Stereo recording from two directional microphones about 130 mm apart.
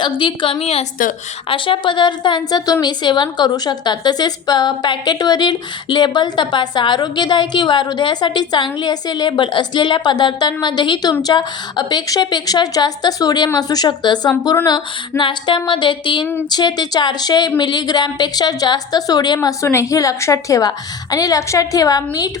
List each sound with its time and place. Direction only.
0.0 s a woman's voice: 40° left (ahead or behind)
0.6 s a woman's voice: 55° left (ahead or behind)
1.5 s a woman's voice: 40° left (ahead or behind)